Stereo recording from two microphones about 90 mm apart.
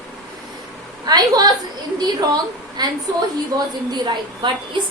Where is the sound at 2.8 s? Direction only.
50° right (ahead or behind).